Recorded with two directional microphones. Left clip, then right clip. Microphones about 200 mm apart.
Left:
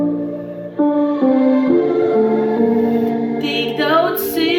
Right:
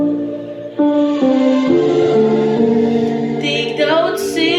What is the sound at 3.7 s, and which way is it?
Music, 20° left (ahead or behind).